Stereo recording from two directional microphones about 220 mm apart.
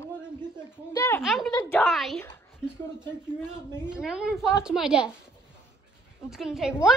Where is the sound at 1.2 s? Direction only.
Centre (ahead or behind).